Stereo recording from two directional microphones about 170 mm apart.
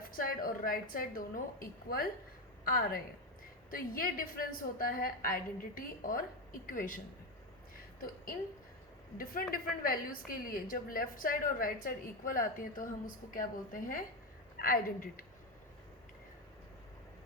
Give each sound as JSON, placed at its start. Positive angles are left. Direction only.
{"t": 0.0, "sound": "a woman's voice", "side_deg": 55}
{"t": 8.0, "sound": "a woman's voice", "side_deg": 55}